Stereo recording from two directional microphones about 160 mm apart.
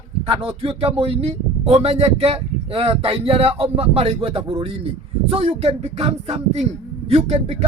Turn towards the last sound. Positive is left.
turn(degrees=-40)  # may be behind; listen again after turning